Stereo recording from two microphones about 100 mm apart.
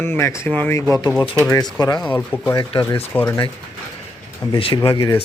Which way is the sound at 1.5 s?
40° left (ahead or behind).